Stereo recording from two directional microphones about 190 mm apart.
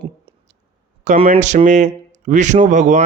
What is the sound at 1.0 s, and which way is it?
Speech, 40° right (ahead or behind).